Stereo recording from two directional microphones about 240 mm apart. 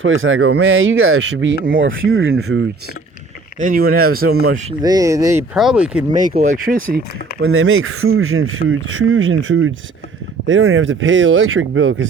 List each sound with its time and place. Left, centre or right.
0.0 s speech: right
3.6 s speech: right
4.8 s speech: centre
6.2 s speech: right
7.4 s speech: right